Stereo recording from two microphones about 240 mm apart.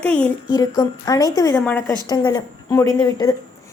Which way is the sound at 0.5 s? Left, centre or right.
Centre.